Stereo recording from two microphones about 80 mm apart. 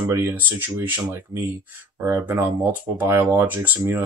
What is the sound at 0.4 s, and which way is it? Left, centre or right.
Speech, right.